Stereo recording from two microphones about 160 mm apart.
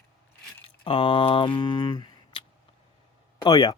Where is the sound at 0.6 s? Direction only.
35° left (ahead or behind).